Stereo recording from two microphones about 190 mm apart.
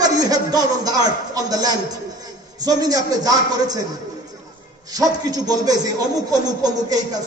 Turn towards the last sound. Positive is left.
turn(degrees=-20)  # may be behind; listen again after turning